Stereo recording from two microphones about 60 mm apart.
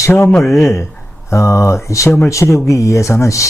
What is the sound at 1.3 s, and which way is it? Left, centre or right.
A man's voice, left.